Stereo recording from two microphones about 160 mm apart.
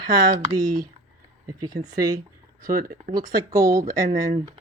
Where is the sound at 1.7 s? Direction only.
25° right (ahead or behind).